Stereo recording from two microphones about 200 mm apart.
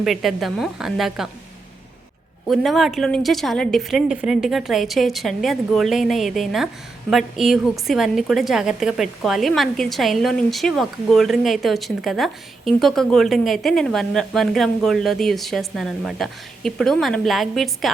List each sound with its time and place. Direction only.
0.0 s a woman's voice: centre (ahead or behind)
2.5 s a woman's voice: centre (ahead or behind)